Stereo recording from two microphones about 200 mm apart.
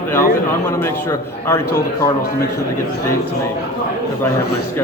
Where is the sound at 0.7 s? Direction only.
15° left (ahead or behind).